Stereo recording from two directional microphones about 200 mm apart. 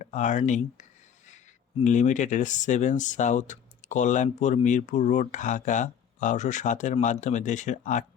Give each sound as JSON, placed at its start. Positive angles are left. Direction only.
{"t": 0.0, "sound": "speech", "side_deg": 35}